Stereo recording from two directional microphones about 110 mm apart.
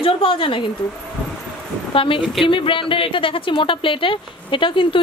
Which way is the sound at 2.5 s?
50° left (ahead or behind).